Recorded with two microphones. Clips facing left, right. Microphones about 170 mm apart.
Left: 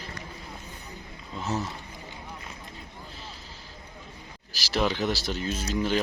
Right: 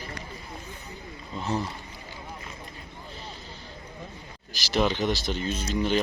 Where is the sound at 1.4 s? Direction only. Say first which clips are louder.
Right 1 dB; 5° left (ahead or behind).